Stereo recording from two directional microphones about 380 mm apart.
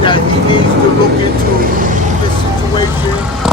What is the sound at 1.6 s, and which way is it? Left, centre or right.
Vehicle, right.